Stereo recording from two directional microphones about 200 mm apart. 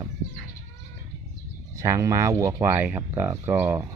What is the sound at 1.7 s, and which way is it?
Speech, 15° right (ahead or behind).